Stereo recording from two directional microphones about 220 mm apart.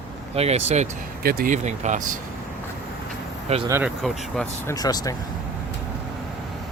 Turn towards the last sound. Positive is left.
turn(degrees=15)  # may be behind; listen again after turning